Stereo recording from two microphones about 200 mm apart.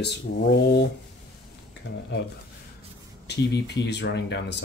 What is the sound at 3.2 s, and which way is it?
Speech, 60° left (ahead or behind).